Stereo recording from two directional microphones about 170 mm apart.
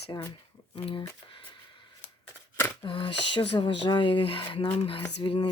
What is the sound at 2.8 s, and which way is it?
Speech, 30° left (ahead or behind).